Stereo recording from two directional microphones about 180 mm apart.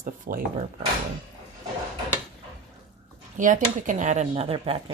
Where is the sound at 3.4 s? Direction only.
45° right (ahead or behind).